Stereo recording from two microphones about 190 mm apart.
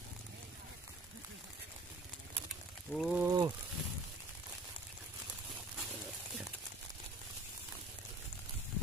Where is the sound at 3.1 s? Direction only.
20° right (ahead or behind).